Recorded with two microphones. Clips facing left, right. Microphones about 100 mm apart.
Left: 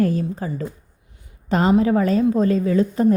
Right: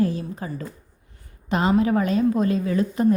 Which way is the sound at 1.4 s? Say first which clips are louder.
Left 3 dB; 40° left (ahead or behind).